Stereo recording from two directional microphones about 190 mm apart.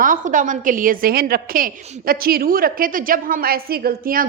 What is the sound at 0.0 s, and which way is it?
A woman's voice, 45° right (ahead or behind).